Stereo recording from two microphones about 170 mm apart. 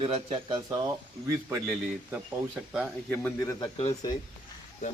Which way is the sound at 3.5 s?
30° left (ahead or behind).